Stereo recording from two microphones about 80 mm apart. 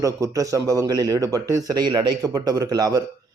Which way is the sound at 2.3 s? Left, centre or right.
Right.